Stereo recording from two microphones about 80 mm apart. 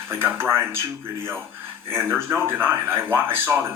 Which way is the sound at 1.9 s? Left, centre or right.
Right.